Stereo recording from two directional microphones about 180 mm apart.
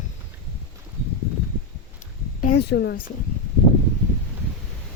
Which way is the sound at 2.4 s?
65° left (ahead or behind).